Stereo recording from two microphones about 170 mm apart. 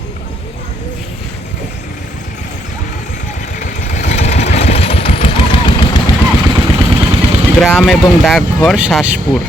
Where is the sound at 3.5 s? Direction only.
50° left (ahead or behind); by 5.8 s 30° left (ahead or behind).